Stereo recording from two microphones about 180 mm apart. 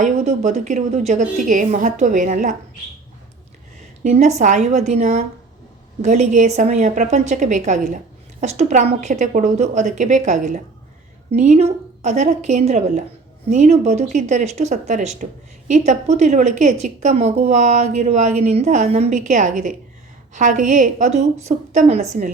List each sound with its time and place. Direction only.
0.0 s a woman's voice: 40° right (ahead or behind)
4.0 s a woman's voice: 40° right (ahead or behind)